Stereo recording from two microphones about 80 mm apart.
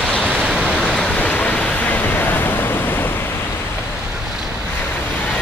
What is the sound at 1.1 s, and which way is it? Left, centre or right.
Waves, centre.